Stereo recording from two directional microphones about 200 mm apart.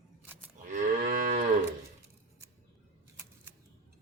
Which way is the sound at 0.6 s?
40° right (ahead or behind).